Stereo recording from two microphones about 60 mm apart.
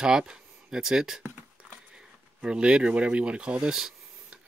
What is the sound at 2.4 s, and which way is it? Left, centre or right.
Speech, centre.